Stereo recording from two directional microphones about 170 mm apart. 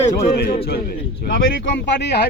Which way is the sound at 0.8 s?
60° left (ahead or behind).